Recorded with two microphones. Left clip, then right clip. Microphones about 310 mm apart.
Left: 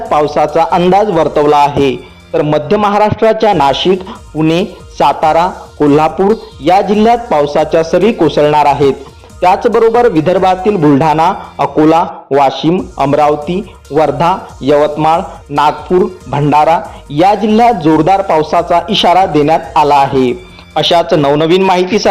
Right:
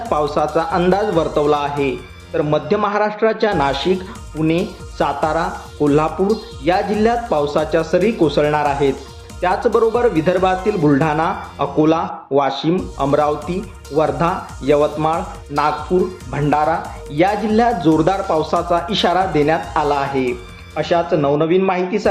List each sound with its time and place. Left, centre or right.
0.1 s a man's voice: centre